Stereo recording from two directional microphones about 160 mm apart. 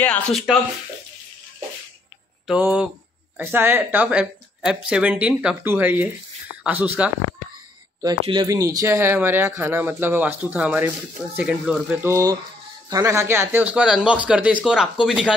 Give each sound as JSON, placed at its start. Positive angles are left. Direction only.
{"t": 0.0, "sound": "speech", "side_deg": 5}
{"t": 2.4, "sound": "speech", "side_deg": -5}
{"t": 8.0, "sound": "speech", "side_deg": -25}